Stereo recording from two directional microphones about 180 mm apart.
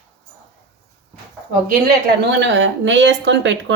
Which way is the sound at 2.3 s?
80° right.